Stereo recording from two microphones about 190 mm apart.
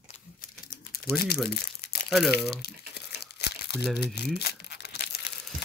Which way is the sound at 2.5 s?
55° left (ahead or behind).